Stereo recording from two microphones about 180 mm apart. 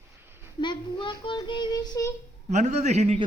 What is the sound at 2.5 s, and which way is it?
Speech, 40° right (ahead or behind).